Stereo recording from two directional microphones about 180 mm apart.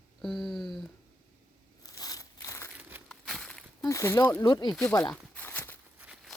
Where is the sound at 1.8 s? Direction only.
20° left (ahead or behind).